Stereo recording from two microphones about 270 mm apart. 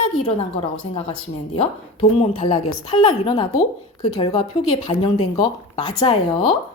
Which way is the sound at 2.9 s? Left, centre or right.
Centre.